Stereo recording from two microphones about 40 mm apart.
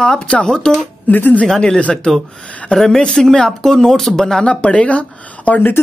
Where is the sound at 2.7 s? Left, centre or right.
Centre.